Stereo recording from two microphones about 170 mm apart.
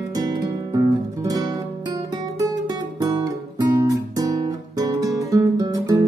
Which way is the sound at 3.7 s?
20° right (ahead or behind).